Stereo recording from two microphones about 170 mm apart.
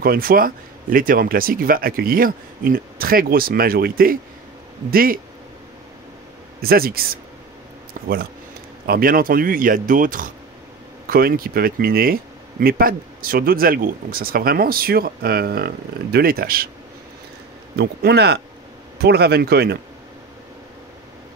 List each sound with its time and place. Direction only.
0.0 s speech: 60° right (ahead or behind)
6.6 s speech: 60° right (ahead or behind)
8.8 s speech: 60° right (ahead or behind)
17.7 s speech: 75° right (ahead or behind)